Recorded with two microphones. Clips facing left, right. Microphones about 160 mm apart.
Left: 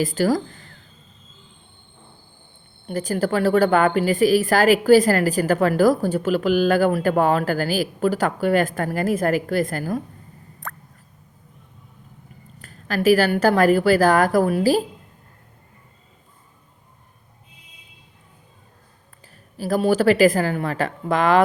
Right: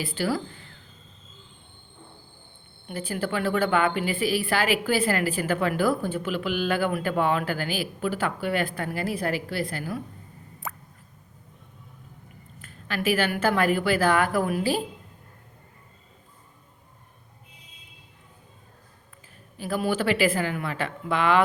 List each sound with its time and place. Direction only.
0.0 s a woman's voice: 40° left (ahead or behind)
2.8 s a woman's voice: 40° left (ahead or behind)
10.6 s a sound: 5° right (ahead or behind)
12.6 s a woman's voice: 40° left (ahead or behind)
19.5 s a woman's voice: 40° left (ahead or behind)